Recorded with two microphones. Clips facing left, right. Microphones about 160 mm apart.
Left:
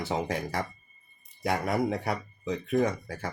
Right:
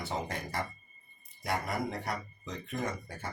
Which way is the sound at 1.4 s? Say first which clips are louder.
Left 6 dB; 70° left (ahead or behind).